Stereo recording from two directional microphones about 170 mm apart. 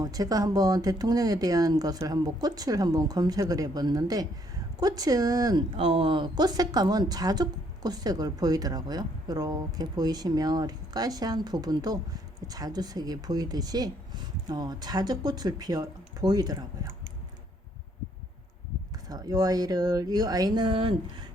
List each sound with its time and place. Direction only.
0.0 s speech: 20° right (ahead or behind)
19.0 s speech: 20° right (ahead or behind)